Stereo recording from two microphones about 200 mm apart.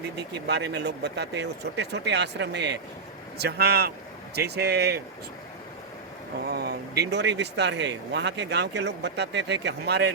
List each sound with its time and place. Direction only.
0.2 s speech: 55° right (ahead or behind)
6.4 s speech: 55° right (ahead or behind)